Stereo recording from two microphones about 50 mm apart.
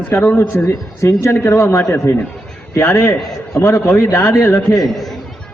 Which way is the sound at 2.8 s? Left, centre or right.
Left.